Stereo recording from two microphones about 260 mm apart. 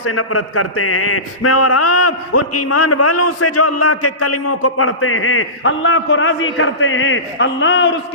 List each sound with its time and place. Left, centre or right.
0.0 s a man's voice: left